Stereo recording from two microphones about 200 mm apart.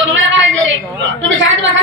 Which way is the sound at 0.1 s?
70° right (ahead or behind).